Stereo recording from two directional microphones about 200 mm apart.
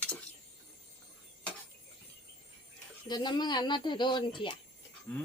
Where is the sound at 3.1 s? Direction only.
20° left (ahead or behind).